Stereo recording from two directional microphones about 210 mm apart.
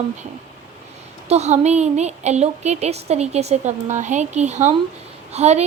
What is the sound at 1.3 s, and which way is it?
Speech, 30° right (ahead or behind).